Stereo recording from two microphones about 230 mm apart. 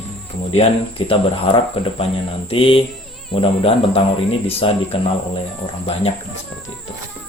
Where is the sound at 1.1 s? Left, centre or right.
Left.